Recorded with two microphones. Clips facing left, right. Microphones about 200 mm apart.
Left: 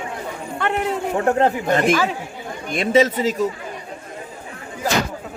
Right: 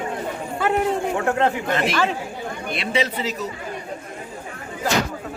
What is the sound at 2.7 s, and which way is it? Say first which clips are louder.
Speech: left 8 dB; 45° left (ahead or behind).